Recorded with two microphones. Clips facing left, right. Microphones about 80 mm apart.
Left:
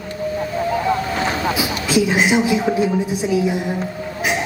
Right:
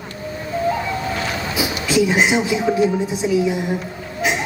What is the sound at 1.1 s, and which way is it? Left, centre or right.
Vehicle, left.